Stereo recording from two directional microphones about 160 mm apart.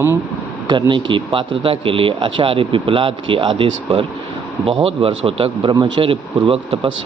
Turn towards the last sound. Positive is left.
turn(degrees=-35)  # may be behind; listen again after turning